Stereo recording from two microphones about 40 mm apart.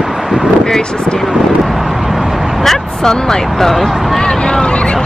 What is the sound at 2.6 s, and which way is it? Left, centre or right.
Speech, centre.